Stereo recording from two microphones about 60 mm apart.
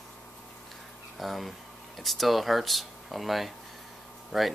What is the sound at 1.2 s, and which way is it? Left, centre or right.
Speech, centre.